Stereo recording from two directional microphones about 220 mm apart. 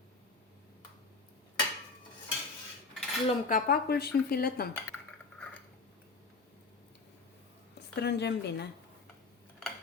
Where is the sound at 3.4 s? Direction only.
40° left (ahead or behind).